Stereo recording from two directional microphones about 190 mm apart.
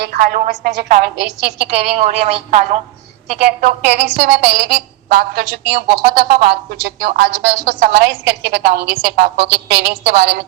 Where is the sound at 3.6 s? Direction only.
55° right (ahead or behind).